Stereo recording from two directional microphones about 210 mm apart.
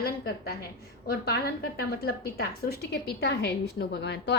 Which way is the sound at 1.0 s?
50° left (ahead or behind).